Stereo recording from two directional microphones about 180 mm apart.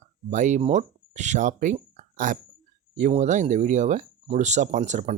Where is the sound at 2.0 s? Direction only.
45° right (ahead or behind).